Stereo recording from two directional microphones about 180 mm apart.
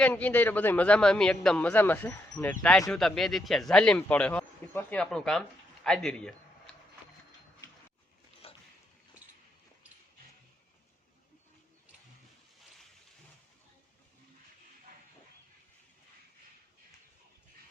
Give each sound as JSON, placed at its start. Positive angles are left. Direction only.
{"t": 0.0, "sound": "a man's voice", "side_deg": 10}
{"t": 8.4, "sound": "dog", "side_deg": 30}